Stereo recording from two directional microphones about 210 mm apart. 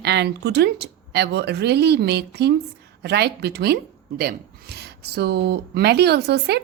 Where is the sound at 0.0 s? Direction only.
55° right (ahead or behind).